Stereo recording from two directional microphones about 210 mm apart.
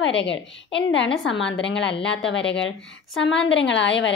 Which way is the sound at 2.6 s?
65° left (ahead or behind).